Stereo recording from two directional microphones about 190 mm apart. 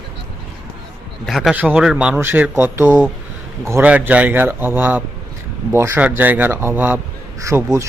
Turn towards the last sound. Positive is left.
turn(degrees=-15)  # may be behind; listen again after turning